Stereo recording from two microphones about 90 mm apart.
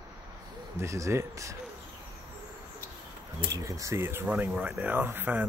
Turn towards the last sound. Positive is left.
turn(degrees=-20)  # may be behind; listen again after turning